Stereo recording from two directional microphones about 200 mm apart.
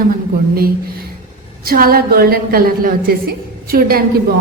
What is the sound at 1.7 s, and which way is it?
A woman's voice, 50° right (ahead or behind).